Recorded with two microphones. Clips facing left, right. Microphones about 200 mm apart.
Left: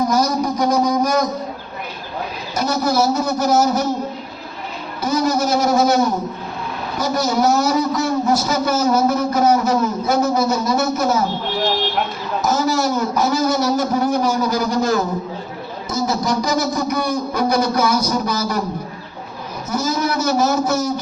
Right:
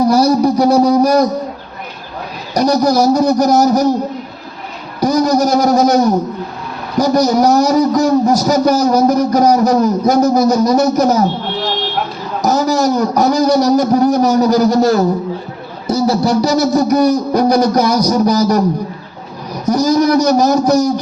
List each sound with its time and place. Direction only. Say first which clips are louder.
0.0 s a man's voice: right 7 dB; 35° right (ahead or behind)
2.6 s a man's voice: right 6 dB; 40° right (ahead or behind)
4.9 s a man's voice: right 6 dB; 40° right (ahead or behind)
7.0 s a man's voice: right 7 dB; 40° right (ahead or behind)
12.4 s a man's voice: right 5 dB; 40° right (ahead or behind)
19.6 s a man's voice: right 9 dB; 40° right (ahead or behind)